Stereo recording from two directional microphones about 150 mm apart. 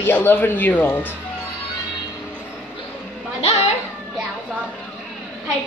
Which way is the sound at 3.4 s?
45° left (ahead or behind).